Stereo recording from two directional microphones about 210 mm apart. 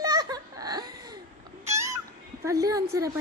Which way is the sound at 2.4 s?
15° right (ahead or behind).